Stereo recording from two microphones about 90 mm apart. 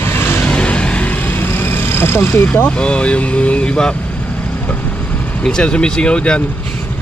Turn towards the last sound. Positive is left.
turn(degrees=10)  # may be behind; listen again after turning